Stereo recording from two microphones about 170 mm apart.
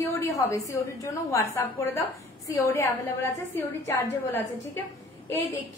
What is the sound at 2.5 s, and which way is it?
A woman's voice, 15° left (ahead or behind).